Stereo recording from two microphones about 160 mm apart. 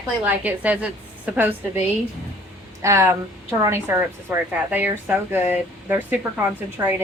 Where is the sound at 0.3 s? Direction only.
10° right (ahead or behind).